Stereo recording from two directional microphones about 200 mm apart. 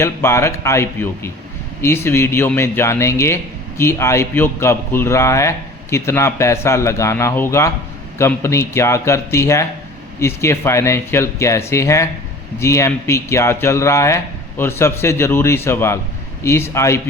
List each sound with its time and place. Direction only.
0.0 s a man's voice: 15° left (ahead or behind)